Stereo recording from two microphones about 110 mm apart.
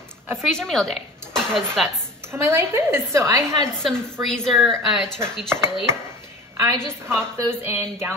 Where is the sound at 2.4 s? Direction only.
20° right (ahead or behind).